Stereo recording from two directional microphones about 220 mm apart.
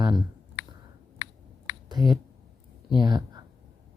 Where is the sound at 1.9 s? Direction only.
20° right (ahead or behind).